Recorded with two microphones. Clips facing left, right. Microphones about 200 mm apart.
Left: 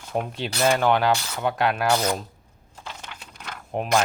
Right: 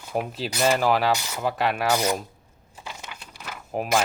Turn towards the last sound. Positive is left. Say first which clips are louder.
# left 1 dB
turn(degrees=-5)  # may be behind; listen again after turning